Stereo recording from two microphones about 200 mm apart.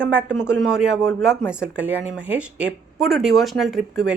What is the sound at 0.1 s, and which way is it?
Speech, 5° right (ahead or behind).